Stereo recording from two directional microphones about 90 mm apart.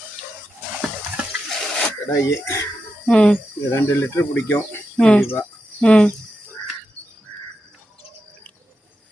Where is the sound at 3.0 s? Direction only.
10° left (ahead or behind).